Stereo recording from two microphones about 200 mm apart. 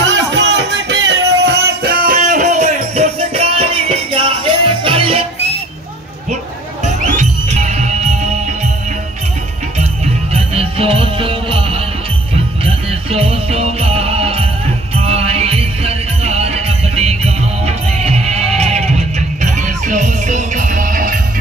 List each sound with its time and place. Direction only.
0.0 s music: 65° right (ahead or behind); by 5.2 s 25° right (ahead or behind)
6.8 s music: 35° right (ahead or behind)
10.3 s music: 30° right (ahead or behind)